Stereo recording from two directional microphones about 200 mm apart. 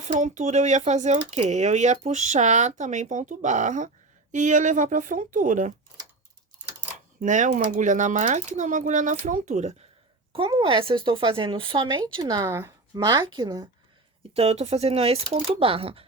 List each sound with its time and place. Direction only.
0.2 s speech: 35° right (ahead or behind)
7.2 s speech: 40° right (ahead or behind)
10.3 s speech: 25° right (ahead or behind)
14.3 s speech: 30° right (ahead or behind)